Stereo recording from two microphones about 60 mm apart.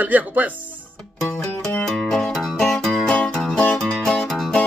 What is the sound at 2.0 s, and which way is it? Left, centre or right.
Music, centre.